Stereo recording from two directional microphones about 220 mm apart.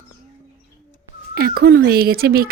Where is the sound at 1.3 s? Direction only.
45° right (ahead or behind).